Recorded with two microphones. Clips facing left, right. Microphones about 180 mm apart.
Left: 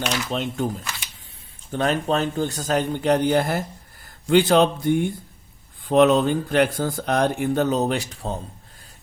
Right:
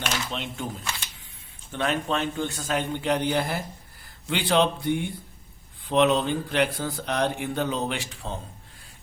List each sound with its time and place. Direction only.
0.3 s speech: 40° left (ahead or behind)
1.7 s a man's voice: 40° left (ahead or behind)